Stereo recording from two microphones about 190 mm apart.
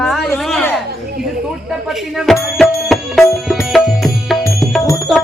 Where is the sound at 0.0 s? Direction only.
Centre (ahead or behind).